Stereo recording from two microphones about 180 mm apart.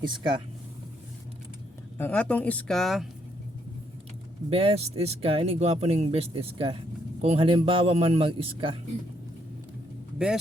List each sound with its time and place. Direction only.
0.0 s speech: 25° right (ahead or behind)
2.0 s speech: 10° left (ahead or behind)
4.4 s speech: 35° right (ahead or behind)